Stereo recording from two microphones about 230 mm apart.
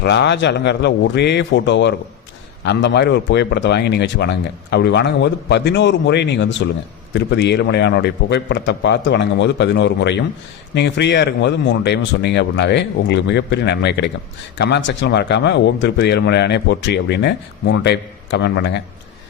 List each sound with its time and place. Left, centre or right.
0.0 s a man's voice: left